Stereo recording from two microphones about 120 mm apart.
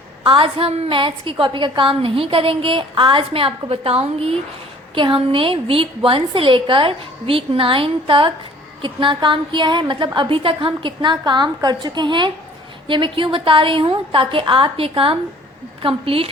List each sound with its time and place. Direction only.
0.3 s a woman's voice: 50° right (ahead or behind)